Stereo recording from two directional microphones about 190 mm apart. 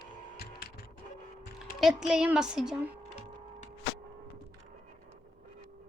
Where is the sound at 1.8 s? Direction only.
Centre (ahead or behind).